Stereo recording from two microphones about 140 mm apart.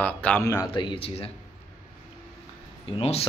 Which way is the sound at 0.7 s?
35° left (ahead or behind).